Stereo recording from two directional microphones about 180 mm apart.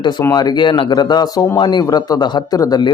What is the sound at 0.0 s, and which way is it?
Speech, 20° left (ahead or behind).